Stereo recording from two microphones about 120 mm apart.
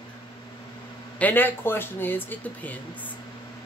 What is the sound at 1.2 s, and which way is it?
Speech, 15° left (ahead or behind).